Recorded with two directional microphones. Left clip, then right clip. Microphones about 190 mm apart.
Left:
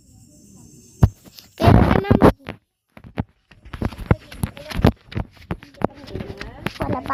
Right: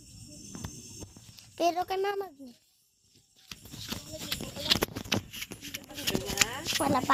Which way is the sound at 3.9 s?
5° right (ahead or behind).